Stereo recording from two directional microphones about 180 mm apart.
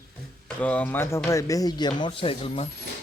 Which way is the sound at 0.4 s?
5° left (ahead or behind).